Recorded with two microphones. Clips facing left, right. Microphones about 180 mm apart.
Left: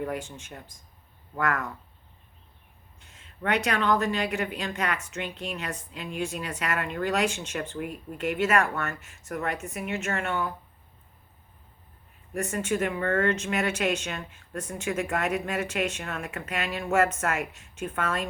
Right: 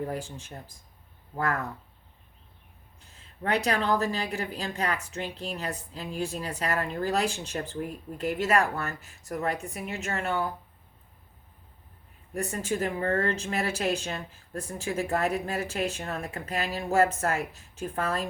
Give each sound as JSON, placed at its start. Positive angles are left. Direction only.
{"t": 0.0, "sound": "speech", "side_deg": -35}
{"t": 3.0, "sound": "speech", "side_deg": -35}
{"t": 12.3, "sound": "speech", "side_deg": -35}